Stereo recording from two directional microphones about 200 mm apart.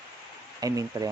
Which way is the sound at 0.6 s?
15° right (ahead or behind).